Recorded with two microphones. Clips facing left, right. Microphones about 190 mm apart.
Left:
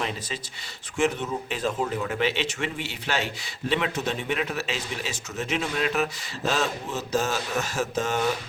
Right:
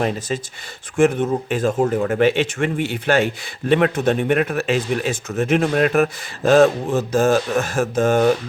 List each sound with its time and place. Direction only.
0.9 s speech: 50° right (ahead or behind)